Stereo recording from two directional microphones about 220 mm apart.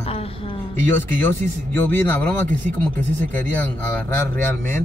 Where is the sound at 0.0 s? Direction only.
25° left (ahead or behind).